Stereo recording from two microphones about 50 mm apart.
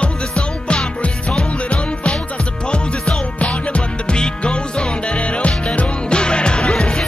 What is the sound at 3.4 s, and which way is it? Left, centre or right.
Music, left.